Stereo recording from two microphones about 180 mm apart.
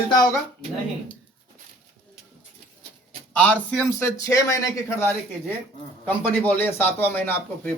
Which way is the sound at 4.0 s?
15° left (ahead or behind).